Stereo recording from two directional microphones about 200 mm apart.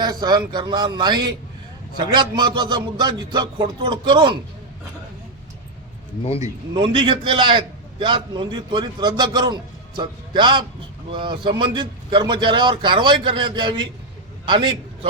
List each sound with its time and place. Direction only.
0.0 s a man's voice: 20° right (ahead or behind)
6.4 s a man's voice: 25° right (ahead or behind)